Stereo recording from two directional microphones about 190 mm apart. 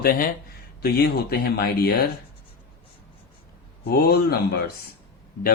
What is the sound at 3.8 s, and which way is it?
Speech, 55° left (ahead or behind).